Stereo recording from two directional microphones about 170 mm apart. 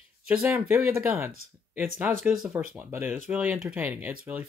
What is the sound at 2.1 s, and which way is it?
Speech, centre (ahead or behind).